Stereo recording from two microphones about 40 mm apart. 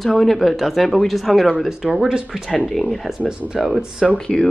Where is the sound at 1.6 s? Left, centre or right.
Centre.